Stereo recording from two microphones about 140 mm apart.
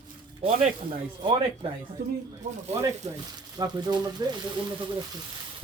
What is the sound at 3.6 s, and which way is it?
Speech, 30° right (ahead or behind).